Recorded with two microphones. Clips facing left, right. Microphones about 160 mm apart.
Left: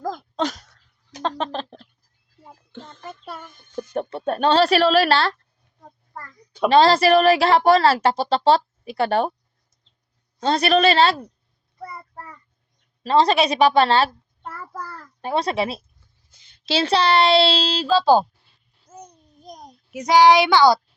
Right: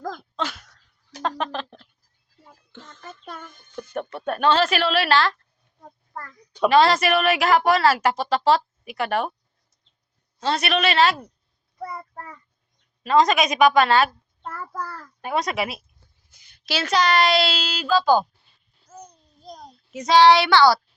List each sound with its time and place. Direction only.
0.3 s a sound: 40° left (ahead or behind)
3.2 s a sound: 5° left (ahead or behind)
3.8 s speech: 30° left (ahead or behind)
6.7 s speech: 30° left (ahead or behind)
10.4 s speech: 35° left (ahead or behind)
11.9 s child singing: 5° left (ahead or behind)
13.0 s speech: 35° left (ahead or behind)
14.4 s child singing: 5° left (ahead or behind)
15.2 s a child's voice: 30° left (ahead or behind)
18.9 s a sound: 20° left (ahead or behind)